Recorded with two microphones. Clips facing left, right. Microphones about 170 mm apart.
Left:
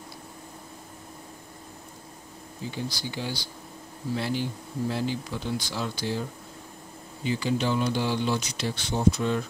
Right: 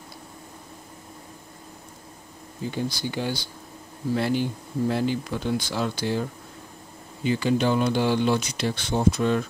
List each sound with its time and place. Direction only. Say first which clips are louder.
2.7 s speech: right 5 dB; 55° right (ahead or behind)
7.2 s speech: right 4 dB; 55° right (ahead or behind)